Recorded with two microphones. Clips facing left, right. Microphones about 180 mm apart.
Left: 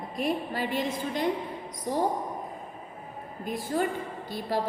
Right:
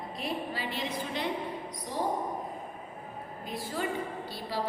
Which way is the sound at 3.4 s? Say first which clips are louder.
Left 6 dB; 50° left (ahead or behind).